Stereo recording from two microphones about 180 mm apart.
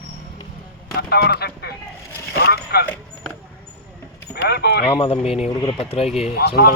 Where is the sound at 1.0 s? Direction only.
65° left (ahead or behind).